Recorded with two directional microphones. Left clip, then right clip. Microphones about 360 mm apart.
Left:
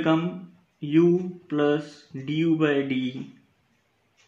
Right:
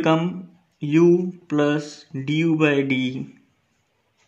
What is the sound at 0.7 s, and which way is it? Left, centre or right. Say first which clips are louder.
Speech: right 4 dB; right.